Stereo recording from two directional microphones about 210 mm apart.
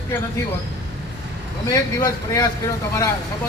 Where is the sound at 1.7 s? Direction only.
15° left (ahead or behind).